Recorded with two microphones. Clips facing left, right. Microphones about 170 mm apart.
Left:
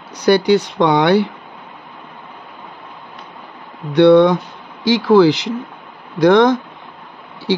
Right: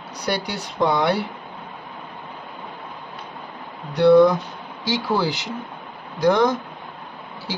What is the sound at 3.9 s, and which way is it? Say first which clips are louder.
Speech: left 4 dB; 75° left (ahead or behind).